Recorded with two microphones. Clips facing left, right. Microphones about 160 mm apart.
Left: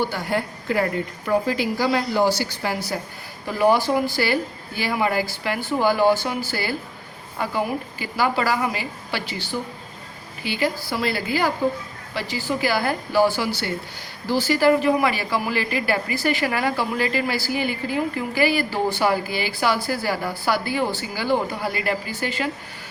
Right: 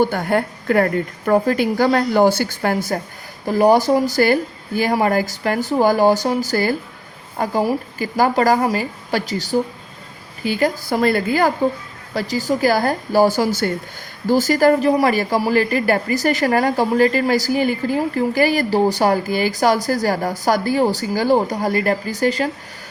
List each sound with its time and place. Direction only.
0.0 s a woman's voice: 50° right (ahead or behind)